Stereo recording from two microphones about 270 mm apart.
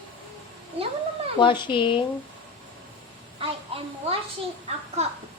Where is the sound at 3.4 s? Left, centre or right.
Right.